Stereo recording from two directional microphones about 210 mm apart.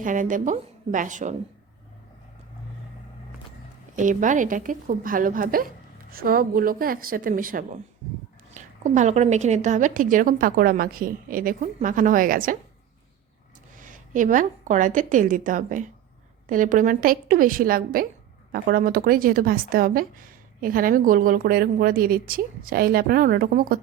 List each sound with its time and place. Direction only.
0.0 s a woman's voice: 40° right (ahead or behind)
3.9 s a woman's voice: 35° right (ahead or behind)
13.7 s a woman's voice: 40° right (ahead or behind)